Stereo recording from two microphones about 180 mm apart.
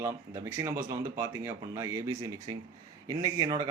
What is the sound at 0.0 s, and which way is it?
A man's voice, 15° right (ahead or behind).